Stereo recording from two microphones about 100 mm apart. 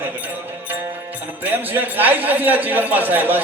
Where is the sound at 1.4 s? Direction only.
20° right (ahead or behind).